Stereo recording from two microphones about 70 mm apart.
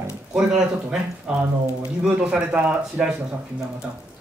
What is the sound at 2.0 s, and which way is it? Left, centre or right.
Speech, centre.